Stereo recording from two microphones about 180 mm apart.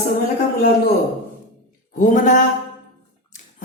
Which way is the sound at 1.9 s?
45° left (ahead or behind).